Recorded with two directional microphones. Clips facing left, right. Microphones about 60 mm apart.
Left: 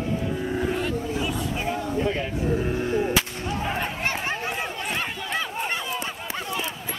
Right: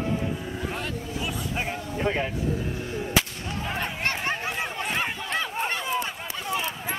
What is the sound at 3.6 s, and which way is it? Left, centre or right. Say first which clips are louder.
Chatter: even; centre.